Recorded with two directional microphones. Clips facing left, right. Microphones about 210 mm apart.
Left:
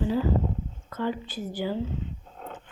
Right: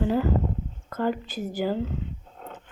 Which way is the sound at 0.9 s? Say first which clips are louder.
Right 3 dB; 45° right (ahead or behind).